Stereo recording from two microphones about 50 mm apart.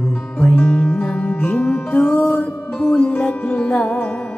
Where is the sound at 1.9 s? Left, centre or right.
Left.